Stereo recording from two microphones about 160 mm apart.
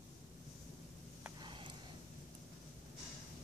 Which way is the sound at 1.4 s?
30° right (ahead or behind).